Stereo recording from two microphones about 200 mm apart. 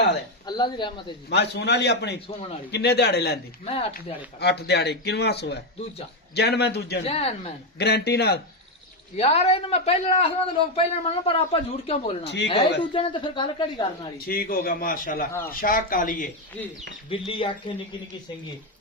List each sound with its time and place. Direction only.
0.4 s speech: 20° left (ahead or behind)
1.3 s speech: 55° left (ahead or behind)
2.2 s speech: 30° left (ahead or behind)
2.7 s speech: 55° left (ahead or behind)
4.4 s speech: 55° left (ahead or behind)
7.0 s a man's voice: 30° left (ahead or behind)
7.8 s a man's voice: 55° left (ahead or behind)
9.1 s a man's voice: 30° left (ahead or behind)
12.2 s speech: 60° left (ahead or behind)
12.5 s speech: 25° left (ahead or behind)
14.3 s a man's voice: 45° left (ahead or behind)
16.6 s speech: 5° left (ahead or behind)
17.1 s speech: 25° left (ahead or behind)